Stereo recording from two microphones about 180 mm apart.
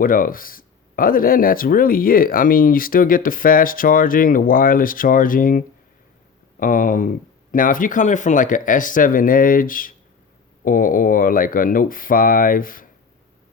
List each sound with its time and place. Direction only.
0.0 s speech: 50° left (ahead or behind)